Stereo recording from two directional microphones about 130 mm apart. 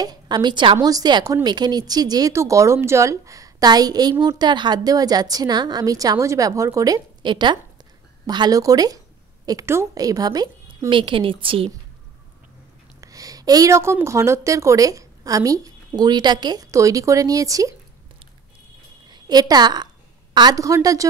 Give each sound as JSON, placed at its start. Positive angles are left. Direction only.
{"t": 0.0, "sound": "a woman's voice", "side_deg": -30}
{"t": 13.0, "sound": "a woman's voice", "side_deg": -25}
{"t": 19.0, "sound": "a woman's voice", "side_deg": -35}